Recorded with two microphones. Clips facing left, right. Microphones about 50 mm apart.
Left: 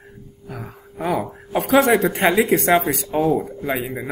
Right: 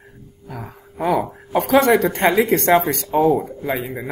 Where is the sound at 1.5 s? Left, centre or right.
Centre.